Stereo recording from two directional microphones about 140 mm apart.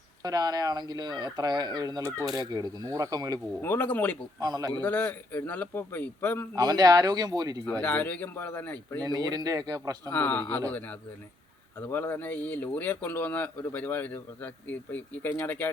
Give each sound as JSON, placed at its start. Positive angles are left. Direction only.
{"t": 0.2, "sound": "speech", "side_deg": -25}
{"t": 3.6, "sound": "speech", "side_deg": 15}
{"t": 4.4, "sound": "speech", "side_deg": -25}
{"t": 4.8, "sound": "speech", "side_deg": 15}
{"t": 6.6, "sound": "speech", "side_deg": -25}
{"t": 7.8, "sound": "speech", "side_deg": 10}
{"t": 9.0, "sound": "speech", "side_deg": -30}
{"t": 10.1, "sound": "speech", "side_deg": 10}
{"t": 11.8, "sound": "speech", "side_deg": 15}